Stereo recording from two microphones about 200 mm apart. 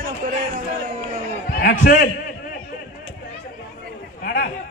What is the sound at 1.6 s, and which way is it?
Speech, 45° left (ahead or behind).